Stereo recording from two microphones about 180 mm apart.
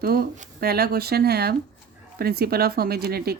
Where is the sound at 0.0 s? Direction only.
55° right (ahead or behind).